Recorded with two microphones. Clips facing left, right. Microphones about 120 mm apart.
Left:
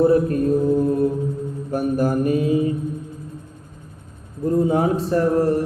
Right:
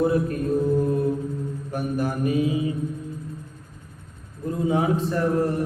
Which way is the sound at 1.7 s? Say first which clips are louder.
Left 7 dB; 40° left (ahead or behind).